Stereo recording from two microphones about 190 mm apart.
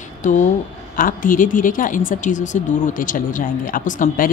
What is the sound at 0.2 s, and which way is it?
Speech, 40° left (ahead or behind).